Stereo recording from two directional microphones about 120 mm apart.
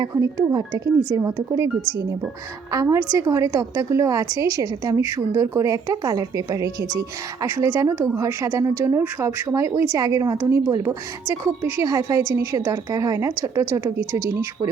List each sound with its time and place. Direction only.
0.0 s speech: 30° right (ahead or behind)
2.7 s speech: 25° right (ahead or behind)